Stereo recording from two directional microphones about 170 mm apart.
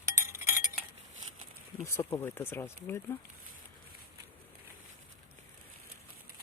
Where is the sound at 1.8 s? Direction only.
15° left (ahead or behind).